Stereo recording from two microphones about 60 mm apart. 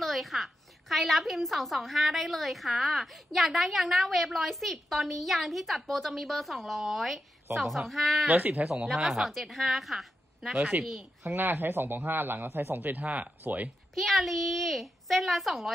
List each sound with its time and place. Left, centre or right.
0.0 s a woman's voice: centre
8.3 s speech: right
8.6 s a woman's voice: centre
11.2 s speech: right
13.9 s a woman's voice: centre